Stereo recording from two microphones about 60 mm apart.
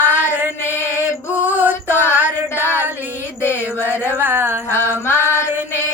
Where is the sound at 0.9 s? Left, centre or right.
Right.